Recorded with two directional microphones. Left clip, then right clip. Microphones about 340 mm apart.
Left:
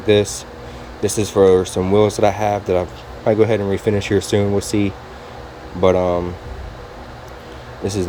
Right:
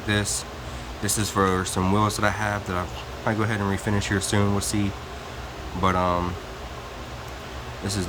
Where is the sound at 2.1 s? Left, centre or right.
Centre.